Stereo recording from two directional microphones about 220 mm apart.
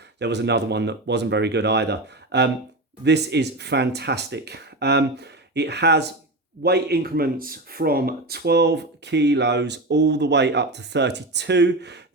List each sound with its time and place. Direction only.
0.2 s speech: 50° right (ahead or behind)